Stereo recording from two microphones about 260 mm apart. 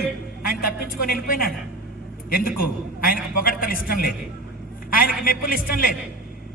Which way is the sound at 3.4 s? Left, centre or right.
Left.